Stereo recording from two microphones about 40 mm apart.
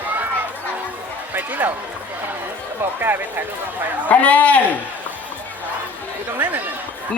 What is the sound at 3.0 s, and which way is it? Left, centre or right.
Speech, right.